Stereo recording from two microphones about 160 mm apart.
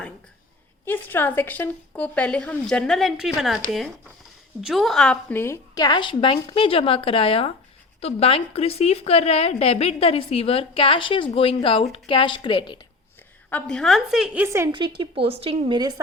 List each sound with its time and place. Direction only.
0.9 s a woman's voice: 10° left (ahead or behind); by 12.8 s 30° left (ahead or behind)
13.5 s a woman's voice: 5° left (ahead or behind); by 14.7 s 15° right (ahead or behind)
14.7 s speech: 30° right (ahead or behind)